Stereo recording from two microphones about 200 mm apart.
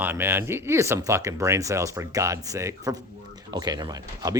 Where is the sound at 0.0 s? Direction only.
10° right (ahead or behind).